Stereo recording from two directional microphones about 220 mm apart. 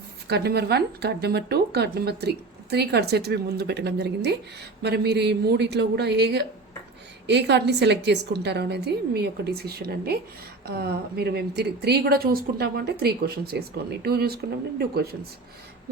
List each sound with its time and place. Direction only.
0.3 s speech: 45° right (ahead or behind)